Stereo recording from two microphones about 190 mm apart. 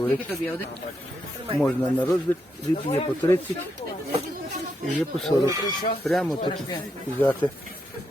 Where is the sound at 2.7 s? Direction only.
30° left (ahead or behind).